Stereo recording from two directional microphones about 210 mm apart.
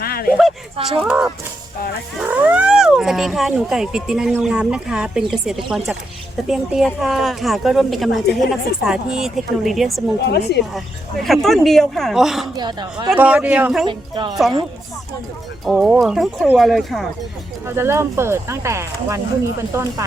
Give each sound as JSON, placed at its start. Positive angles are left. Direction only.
{"t": 0.0, "sound": "a sound", "side_deg": 45}
{"t": 0.9, "sound": "a woman's voice", "side_deg": -5}
{"t": 10.2, "sound": "a woman's voice", "side_deg": 50}
{"t": 10.8, "sound": "a woman's voice", "side_deg": 0}
{"t": 12.5, "sound": "speech", "side_deg": -20}
{"t": 13.1, "sound": "speech", "side_deg": -5}
{"t": 13.8, "sound": "speech", "side_deg": -20}
{"t": 15.6, "sound": "a woman's voice", "side_deg": 0}
{"t": 17.7, "sound": "speech", "side_deg": -10}